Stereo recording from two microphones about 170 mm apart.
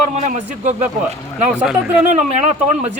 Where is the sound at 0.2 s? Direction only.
45° right (ahead or behind).